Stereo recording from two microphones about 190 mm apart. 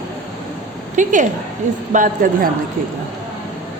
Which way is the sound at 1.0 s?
40° right (ahead or behind).